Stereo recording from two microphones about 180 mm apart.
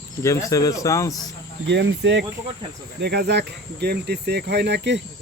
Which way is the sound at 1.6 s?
75° right (ahead or behind).